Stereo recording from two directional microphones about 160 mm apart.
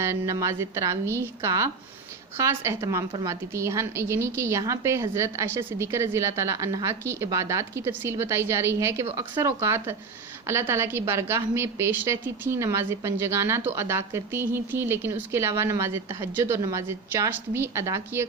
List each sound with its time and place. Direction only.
0.0 s a woman's voice: 15° right (ahead or behind)